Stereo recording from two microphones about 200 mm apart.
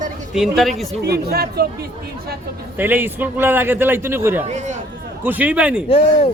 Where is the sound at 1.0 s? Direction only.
55° right (ahead or behind).